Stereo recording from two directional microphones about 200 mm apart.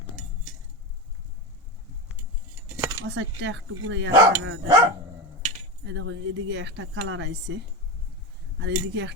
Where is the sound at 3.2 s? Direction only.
65° right (ahead or behind).